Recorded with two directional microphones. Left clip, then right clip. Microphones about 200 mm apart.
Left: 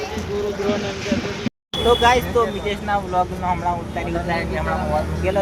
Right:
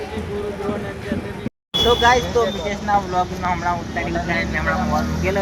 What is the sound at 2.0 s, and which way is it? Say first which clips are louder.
Speech: even; 5° left (ahead or behind).